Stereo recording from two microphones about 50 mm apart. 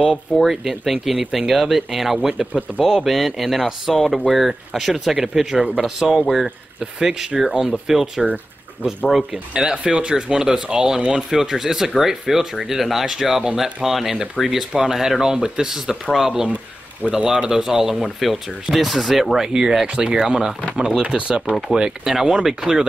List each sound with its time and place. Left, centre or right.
0.0 s speech: centre
9.5 s speech: centre
14.4 s speech: left
14.7 s speech: centre